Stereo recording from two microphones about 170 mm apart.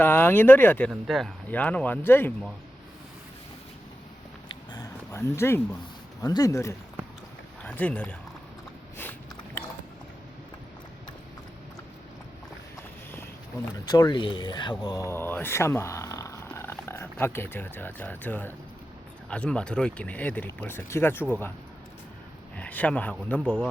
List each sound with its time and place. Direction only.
0.0 s speech: 10° left (ahead or behind)
0.9 s speech: centre (ahead or behind)
4.7 s a sound: 20° left (ahead or behind)
6.2 s speech: 20° left (ahead or behind)
12.7 s boat: 15° left (ahead or behind)
13.8 s speech: 25° left (ahead or behind)
22.5 s speech: 10° left (ahead or behind)